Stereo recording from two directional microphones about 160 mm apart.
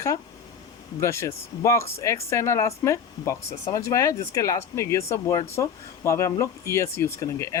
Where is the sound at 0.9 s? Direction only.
15° left (ahead or behind).